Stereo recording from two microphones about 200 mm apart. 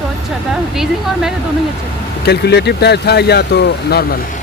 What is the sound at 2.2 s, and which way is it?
Speech, 55° left (ahead or behind).